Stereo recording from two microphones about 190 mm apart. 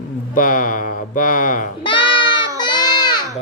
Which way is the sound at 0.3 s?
45° left (ahead or behind).